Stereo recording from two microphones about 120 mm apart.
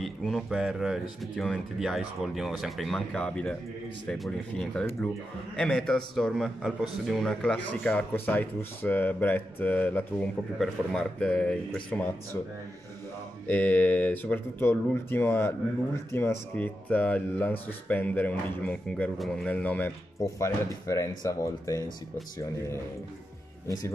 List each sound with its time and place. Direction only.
0.0 s a man's voice: centre (ahead or behind)
13.5 s a man's voice: 15° left (ahead or behind)
20.2 s speech: 25° left (ahead or behind)